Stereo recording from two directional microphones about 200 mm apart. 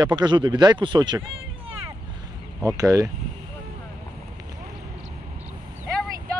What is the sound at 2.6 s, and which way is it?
Speech, 15° right (ahead or behind).